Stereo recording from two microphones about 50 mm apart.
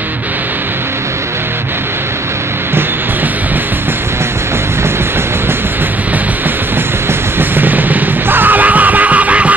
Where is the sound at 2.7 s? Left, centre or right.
Right.